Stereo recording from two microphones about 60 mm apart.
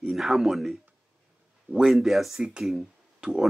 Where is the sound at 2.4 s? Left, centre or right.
Centre.